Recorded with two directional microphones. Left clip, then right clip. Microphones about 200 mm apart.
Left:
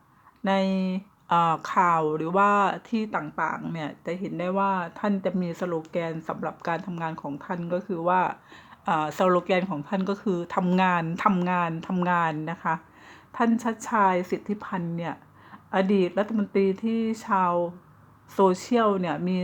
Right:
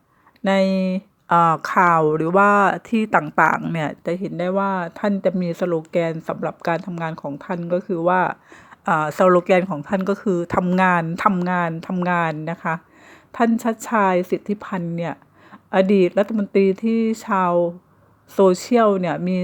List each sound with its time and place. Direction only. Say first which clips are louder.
0.4 s speech: right 7 dB; 35° right (ahead or behind)